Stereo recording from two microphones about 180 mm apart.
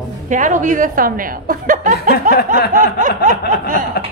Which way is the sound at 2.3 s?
50° right (ahead or behind).